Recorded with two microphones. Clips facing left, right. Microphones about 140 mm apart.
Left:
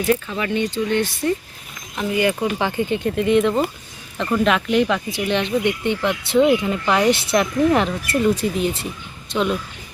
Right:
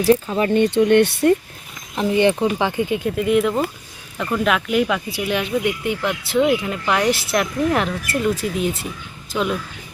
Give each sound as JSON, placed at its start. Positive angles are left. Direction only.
{"t": 0.0, "sound": "speech", "side_deg": -30}
{"t": 0.5, "sound": "speech", "side_deg": -55}
{"t": 2.0, "sound": "speech", "side_deg": -25}